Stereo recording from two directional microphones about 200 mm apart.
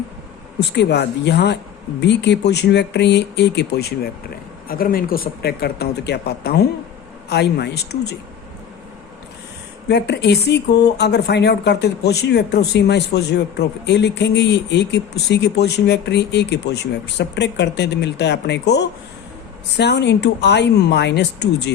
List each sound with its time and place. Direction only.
0.6 s speech: 60° left (ahead or behind)
9.9 s speech: 60° left (ahead or behind)